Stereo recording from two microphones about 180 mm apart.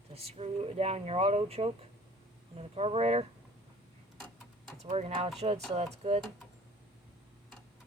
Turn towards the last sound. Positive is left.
turn(degrees=-35)  # may be behind; listen again after turning